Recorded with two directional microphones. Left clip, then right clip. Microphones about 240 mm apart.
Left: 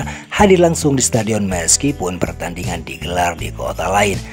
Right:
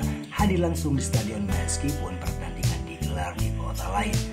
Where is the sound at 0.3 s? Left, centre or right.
Left.